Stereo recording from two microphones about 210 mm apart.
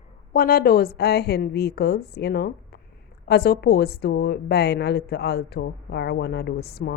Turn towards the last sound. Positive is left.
turn(degrees=50)  # may be behind; listen again after turning